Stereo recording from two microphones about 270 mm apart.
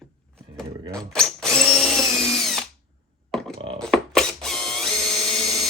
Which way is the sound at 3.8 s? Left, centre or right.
Centre.